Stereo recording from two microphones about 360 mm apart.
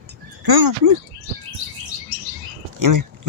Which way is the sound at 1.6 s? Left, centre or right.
Right.